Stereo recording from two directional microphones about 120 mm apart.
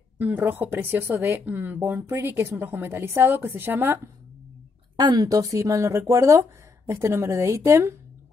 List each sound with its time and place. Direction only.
0.2 s speech: 15° right (ahead or behind)
4.9 s speech: 35° right (ahead or behind)